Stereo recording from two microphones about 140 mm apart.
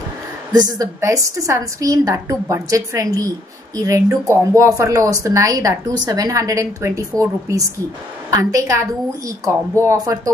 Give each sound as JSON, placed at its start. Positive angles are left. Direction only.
{"t": 0.5, "sound": "a woman's voice", "side_deg": -25}